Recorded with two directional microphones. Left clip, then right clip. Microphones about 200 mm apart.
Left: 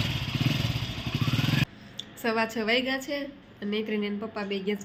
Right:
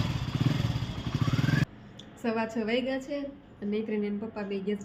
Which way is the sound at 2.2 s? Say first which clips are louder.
Left 4 dB; centre (ahead or behind).